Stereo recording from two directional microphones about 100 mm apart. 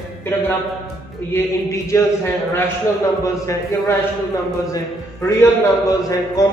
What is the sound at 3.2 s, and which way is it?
Speech, 30° left (ahead or behind).